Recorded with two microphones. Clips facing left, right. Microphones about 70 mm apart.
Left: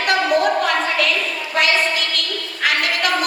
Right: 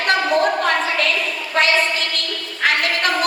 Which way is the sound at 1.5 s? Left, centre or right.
Right.